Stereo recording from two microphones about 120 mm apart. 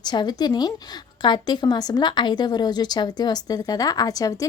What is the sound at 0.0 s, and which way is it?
Speech, 35° left (ahead or behind).